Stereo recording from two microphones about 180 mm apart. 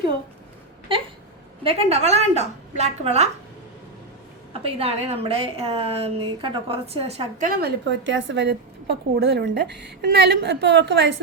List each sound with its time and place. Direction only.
1.6 s a woman's voice: 35° right (ahead or behind)
4.6 s a woman's voice: 35° right (ahead or behind)
7.3 s a woman's voice: 50° right (ahead or behind)
7.9 s a woman's voice: 90° right